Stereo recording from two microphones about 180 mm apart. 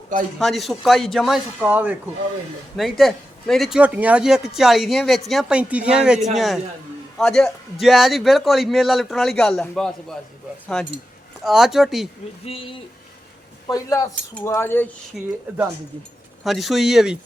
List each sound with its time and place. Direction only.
0.3 s a man's voice: centre (ahead or behind)
11.4 s a man's voice: centre (ahead or behind)
12.5 s speech: 30° left (ahead or behind)
13.7 s speech: 20° left (ahead or behind)
15.1 s a man's voice: centre (ahead or behind)
16.4 s a man's voice: centre (ahead or behind)